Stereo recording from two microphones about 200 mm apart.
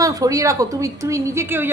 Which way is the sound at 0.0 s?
15° right (ahead or behind).